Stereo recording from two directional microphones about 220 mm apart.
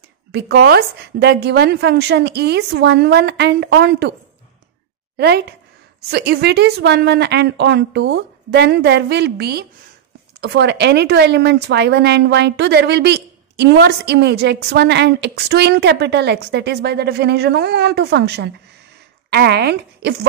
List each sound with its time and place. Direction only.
0.3 s a woman's voice: 50° right (ahead or behind)
5.1 s a woman's voice: 45° right (ahead or behind)